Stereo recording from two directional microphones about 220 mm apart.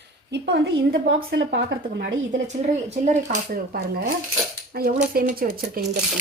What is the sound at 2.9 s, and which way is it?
A woman's voice, 35° right (ahead or behind).